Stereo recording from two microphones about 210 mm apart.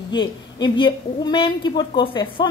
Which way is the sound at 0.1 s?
20° left (ahead or behind).